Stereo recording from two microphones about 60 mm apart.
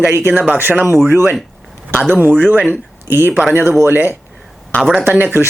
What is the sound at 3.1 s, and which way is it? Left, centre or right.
Speech, right.